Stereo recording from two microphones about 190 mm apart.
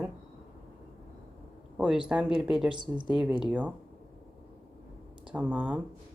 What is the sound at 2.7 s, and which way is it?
Speech, 25° right (ahead or behind).